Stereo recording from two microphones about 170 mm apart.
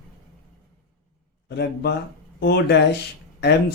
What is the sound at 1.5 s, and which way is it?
Speech, 75° left (ahead or behind).